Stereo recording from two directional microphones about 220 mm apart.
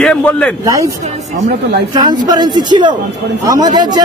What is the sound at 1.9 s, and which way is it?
A man's voice, 20° right (ahead or behind).